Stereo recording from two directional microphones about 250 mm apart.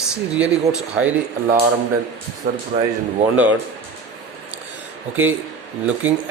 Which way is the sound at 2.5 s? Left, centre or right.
Right.